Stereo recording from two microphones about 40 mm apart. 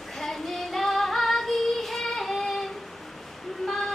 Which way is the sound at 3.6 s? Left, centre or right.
Centre.